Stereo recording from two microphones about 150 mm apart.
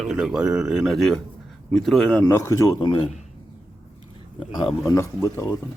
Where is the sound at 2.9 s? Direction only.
35° left (ahead or behind).